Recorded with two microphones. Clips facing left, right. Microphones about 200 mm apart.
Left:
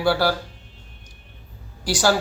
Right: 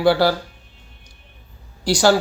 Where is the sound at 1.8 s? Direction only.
15° right (ahead or behind).